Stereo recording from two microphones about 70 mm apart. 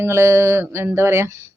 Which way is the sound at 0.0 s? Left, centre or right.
Right.